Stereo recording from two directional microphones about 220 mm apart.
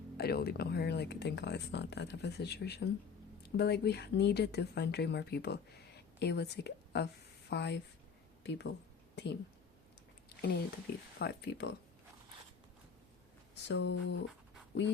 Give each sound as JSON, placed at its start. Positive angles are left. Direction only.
{"t": 0.2, "sound": "a woman's voice", "side_deg": 45}
{"t": 10.2, "sound": "a sound", "side_deg": 45}
{"t": 11.2, "sound": "speech", "side_deg": 50}
{"t": 13.6, "sound": "speech", "side_deg": 55}